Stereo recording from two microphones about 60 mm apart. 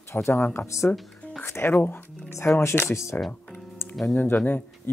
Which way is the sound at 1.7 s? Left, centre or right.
Left.